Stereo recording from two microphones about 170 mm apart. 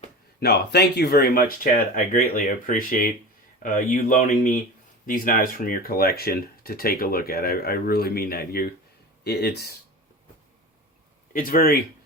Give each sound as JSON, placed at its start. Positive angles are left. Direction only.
{"t": 0.3, "sound": "speech", "side_deg": 75}
{"t": 11.3, "sound": "speech", "side_deg": 55}